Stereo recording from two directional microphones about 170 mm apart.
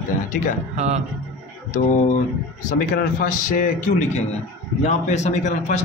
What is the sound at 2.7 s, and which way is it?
A man's voice, 50° left (ahead or behind).